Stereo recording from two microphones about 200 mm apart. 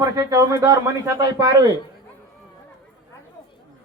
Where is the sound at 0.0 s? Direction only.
15° right (ahead or behind).